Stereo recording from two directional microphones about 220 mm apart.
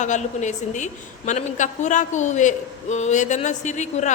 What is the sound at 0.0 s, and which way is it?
A woman's voice, 35° left (ahead or behind).